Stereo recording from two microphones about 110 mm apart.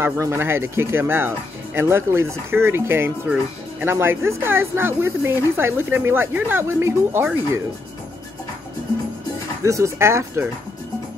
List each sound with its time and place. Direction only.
0.0 s speech: 20° right (ahead or behind)
9.6 s speech: 30° right (ahead or behind)